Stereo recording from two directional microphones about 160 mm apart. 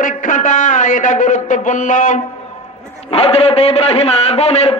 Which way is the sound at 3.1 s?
40° left (ahead or behind).